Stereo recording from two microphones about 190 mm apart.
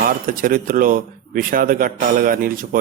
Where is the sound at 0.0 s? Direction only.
50° right (ahead or behind).